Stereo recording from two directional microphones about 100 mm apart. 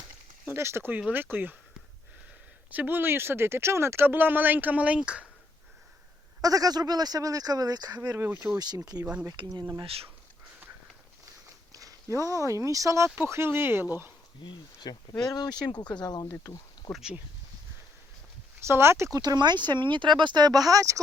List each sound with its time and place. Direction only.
0.4 s speech: 25° right (ahead or behind)
2.6 s speech: 15° right (ahead or behind)
6.4 s speech: 40° right (ahead or behind)
9.8 s speech: 75° right (ahead or behind)
11.4 s a sound: 35° right (ahead or behind)
13.1 s speech: 25° right (ahead or behind)
14.4 s speech: 55° left (ahead or behind)
15.2 s speech: 40° left (ahead or behind)
16.9 s speech: 5° right (ahead or behind)
18.6 s speech: 25° right (ahead or behind)
19.2 s speech: 45° right (ahead or behind)